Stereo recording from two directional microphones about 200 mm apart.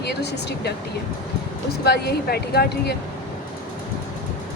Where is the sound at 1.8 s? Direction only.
55° left (ahead or behind).